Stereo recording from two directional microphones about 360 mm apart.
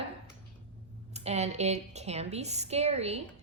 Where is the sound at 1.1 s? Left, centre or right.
Centre.